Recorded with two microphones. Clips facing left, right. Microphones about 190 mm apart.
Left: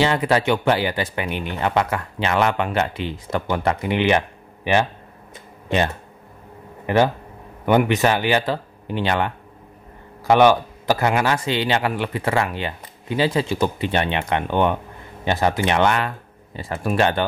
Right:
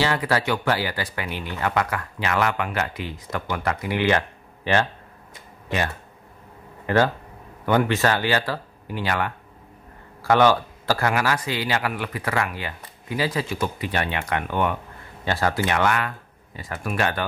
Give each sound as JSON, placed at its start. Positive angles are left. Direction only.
{"t": 0.0, "sound": "speech", "side_deg": 20}
{"t": 6.9, "sound": "speech", "side_deg": 15}